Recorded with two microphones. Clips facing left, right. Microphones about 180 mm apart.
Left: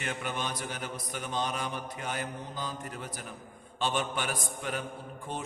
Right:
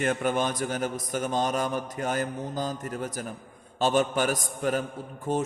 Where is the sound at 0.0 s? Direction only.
45° right (ahead or behind).